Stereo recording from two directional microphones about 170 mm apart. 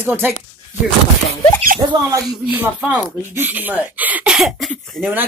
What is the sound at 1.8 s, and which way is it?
Speech, 25° right (ahead or behind).